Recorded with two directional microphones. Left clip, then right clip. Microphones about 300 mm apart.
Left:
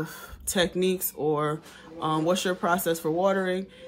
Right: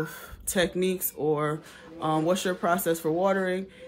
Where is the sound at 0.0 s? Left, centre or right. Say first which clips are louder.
Right 1 dB; centre.